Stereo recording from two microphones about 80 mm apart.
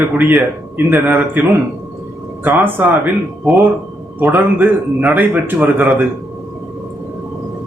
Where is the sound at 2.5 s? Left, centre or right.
Right.